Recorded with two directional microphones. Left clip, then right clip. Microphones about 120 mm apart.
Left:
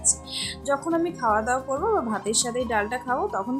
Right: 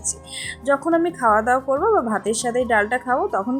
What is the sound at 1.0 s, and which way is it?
Speech, 35° right (ahead or behind).